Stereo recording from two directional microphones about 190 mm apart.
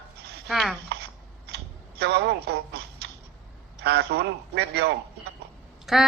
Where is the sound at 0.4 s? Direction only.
Centre (ahead or behind).